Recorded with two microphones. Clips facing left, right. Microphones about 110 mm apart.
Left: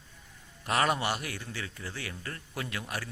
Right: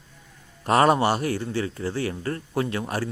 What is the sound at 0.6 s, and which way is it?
Speech, 35° right (ahead or behind).